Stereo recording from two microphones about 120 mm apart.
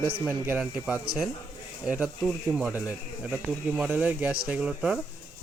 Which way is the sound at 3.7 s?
10° right (ahead or behind).